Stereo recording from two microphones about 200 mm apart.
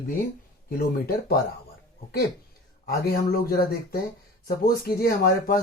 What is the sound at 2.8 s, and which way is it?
Speech, 50° left (ahead or behind).